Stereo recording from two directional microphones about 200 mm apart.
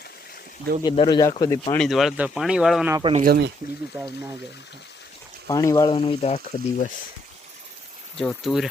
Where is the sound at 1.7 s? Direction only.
Centre (ahead or behind).